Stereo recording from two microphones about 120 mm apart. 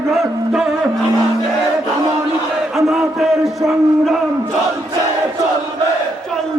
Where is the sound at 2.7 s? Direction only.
Centre (ahead or behind).